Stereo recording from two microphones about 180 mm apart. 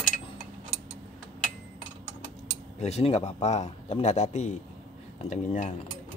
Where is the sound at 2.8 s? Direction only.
35° left (ahead or behind).